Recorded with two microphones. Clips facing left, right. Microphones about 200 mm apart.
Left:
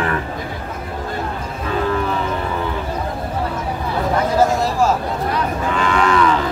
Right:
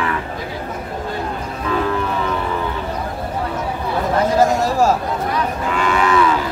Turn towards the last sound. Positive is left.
turn(degrees=-5)  # may be behind; listen again after turning